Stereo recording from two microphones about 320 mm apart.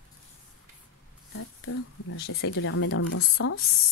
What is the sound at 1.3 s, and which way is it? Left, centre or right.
Speech, left.